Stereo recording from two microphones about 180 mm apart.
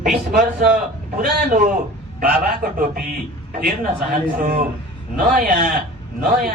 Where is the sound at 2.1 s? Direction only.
55° right (ahead or behind).